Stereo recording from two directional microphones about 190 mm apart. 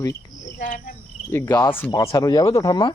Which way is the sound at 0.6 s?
45° left (ahead or behind).